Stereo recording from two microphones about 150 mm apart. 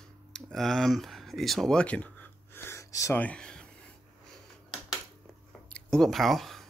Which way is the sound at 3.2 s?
5° left (ahead or behind).